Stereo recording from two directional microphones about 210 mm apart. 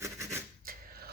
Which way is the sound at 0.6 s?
45° right (ahead or behind).